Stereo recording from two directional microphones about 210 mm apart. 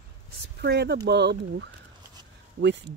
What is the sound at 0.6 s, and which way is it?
Speech, 55° right (ahead or behind).